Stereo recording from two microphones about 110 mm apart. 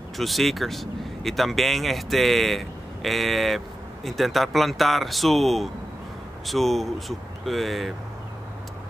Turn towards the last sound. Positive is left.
turn(degrees=0)  # may be behind; listen again after turning